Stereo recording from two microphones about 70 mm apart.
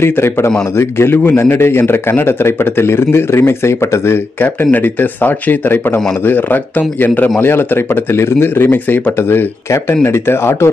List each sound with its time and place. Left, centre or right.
0.0 s a man's voice: left